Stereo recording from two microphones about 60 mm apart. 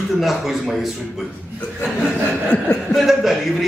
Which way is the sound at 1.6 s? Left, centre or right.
Left.